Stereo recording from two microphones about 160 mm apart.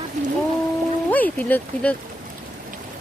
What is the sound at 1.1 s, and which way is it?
Speech, 10° left (ahead or behind).